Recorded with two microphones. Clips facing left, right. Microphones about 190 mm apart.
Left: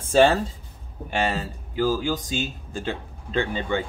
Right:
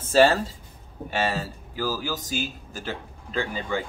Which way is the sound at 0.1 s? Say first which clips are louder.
Left 1 dB; 5° right (ahead or behind).